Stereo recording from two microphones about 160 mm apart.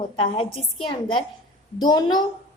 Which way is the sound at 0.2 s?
35° left (ahead or behind).